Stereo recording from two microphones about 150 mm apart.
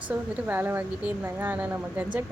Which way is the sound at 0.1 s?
15° right (ahead or behind).